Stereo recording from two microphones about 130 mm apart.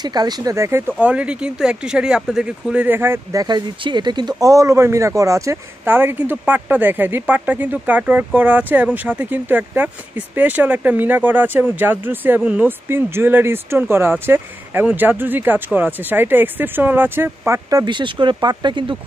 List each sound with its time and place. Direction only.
0.0 s speech: 30° right (ahead or behind)